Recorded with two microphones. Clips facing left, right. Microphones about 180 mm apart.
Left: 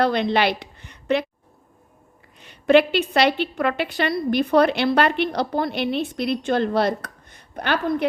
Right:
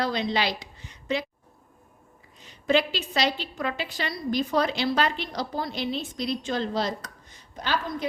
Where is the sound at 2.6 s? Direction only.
60° left (ahead or behind).